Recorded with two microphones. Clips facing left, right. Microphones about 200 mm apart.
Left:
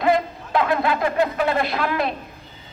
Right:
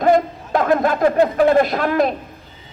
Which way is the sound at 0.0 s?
45° right (ahead or behind).